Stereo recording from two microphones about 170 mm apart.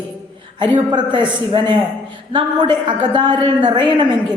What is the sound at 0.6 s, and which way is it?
A woman's voice, 25° right (ahead or behind).